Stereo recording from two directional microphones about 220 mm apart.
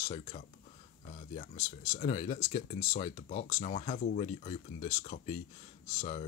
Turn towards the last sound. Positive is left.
turn(degrees=30)  # may be behind; listen again after turning